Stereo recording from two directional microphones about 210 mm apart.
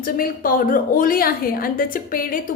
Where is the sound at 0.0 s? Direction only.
40° left (ahead or behind).